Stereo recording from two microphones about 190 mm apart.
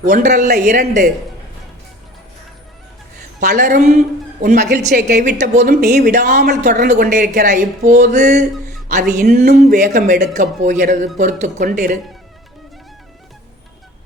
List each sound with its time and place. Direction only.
0.0 s speech: 40° right (ahead or behind)
3.5 s a woman's voice: 45° right (ahead or behind)
4.9 s a sound: 60° right (ahead or behind)
5.2 s speech: 40° right (ahead or behind)
5.8 s speech: 55° right (ahead or behind); by 8.4 s 40° right (ahead or behind)
9.0 s a sound: 55° right (ahead or behind)
9.7 s speech: 45° right (ahead or behind)